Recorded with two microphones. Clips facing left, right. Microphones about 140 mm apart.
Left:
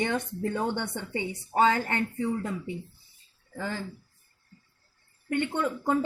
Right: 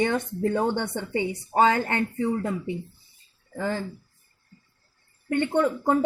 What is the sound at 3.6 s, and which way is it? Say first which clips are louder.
Speech: right 6 dB; 55° right (ahead or behind).